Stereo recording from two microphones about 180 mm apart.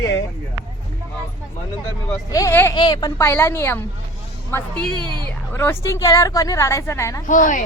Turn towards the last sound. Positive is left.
turn(degrees=45)  # may be behind; listen again after turning